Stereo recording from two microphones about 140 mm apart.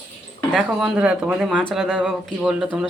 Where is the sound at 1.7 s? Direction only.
Centre (ahead or behind).